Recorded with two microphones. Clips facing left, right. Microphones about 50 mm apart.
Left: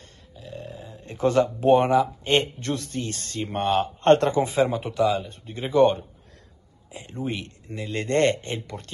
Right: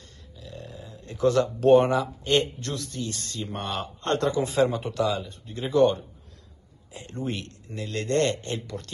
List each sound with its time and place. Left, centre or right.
0.4 s a sound: left
1.4 s speech: centre
2.2 s speech: left
4.5 s speech: centre
5.2 s speech: left
6.9 s speech: centre; by 8.9 s left